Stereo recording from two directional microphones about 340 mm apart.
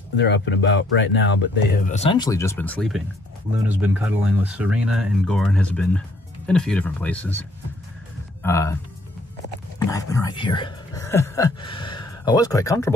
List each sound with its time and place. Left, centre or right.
0.2 s speech: left; by 8.7 s centre
9.8 s speech: centre